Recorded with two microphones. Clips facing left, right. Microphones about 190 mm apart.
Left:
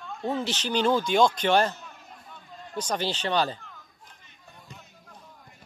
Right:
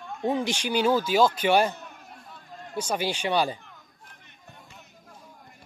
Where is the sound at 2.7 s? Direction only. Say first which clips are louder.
Right 1 dB; 10° right (ahead or behind).